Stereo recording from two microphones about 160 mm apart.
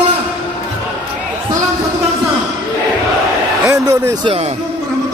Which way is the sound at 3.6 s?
20° right (ahead or behind).